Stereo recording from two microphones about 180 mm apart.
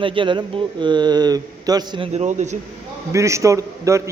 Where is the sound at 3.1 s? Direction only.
15° right (ahead or behind).